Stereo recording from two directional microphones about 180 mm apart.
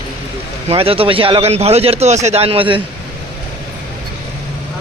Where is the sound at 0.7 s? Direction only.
30° right (ahead or behind).